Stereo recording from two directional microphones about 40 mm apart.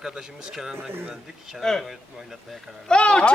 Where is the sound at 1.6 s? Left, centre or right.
Centre.